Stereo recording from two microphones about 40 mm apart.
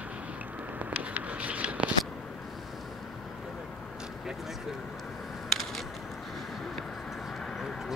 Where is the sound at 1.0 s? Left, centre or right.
Right.